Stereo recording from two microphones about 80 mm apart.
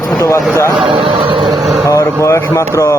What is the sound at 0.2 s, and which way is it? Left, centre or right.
Speech, left.